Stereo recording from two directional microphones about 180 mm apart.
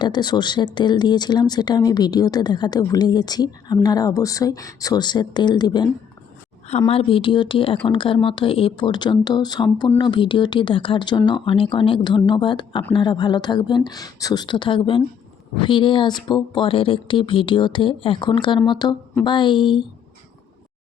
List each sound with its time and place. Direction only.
0.0 s speech: 25° left (ahead or behind)
6.7 s a woman's voice: 35° left (ahead or behind)